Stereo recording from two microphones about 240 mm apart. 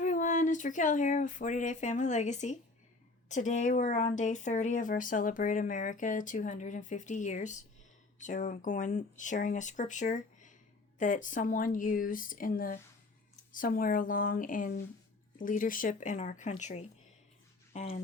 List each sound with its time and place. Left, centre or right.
0.0 s speech: left